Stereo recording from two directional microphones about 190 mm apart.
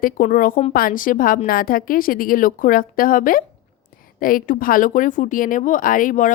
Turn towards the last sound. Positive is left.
turn(degrees=45)  # may be behind; listen again after turning